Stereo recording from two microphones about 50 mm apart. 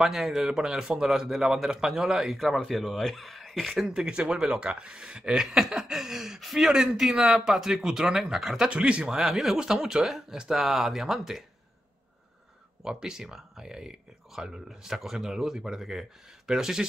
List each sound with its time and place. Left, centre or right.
0.0 s speech: centre
3.8 s speech: centre
12.8 s speech: centre